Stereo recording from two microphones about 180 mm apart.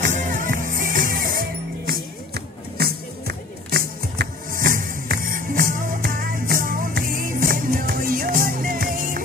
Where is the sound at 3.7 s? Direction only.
55° right (ahead or behind).